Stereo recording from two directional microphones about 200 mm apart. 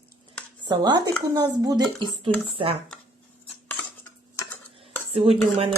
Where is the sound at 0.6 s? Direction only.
20° right (ahead or behind).